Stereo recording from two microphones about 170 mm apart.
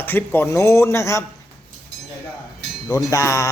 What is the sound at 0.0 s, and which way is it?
Speech, 10° left (ahead or behind).